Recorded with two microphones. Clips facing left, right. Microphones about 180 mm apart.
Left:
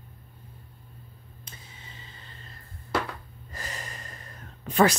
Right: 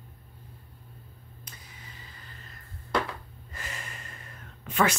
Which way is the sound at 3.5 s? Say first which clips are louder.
Left 2 dB; 35° left (ahead or behind).